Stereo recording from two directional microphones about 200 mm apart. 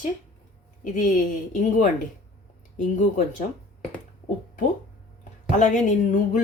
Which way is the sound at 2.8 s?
35° left (ahead or behind).